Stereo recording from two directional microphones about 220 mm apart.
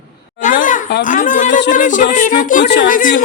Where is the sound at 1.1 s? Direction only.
35° left (ahead or behind).